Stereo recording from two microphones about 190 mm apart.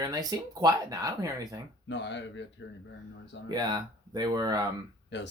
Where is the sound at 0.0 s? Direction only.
20° right (ahead or behind).